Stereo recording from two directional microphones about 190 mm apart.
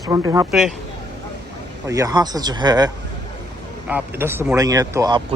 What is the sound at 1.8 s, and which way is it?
Speech, 15° right (ahead or behind).